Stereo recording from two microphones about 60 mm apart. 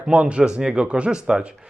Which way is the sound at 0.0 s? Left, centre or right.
Centre.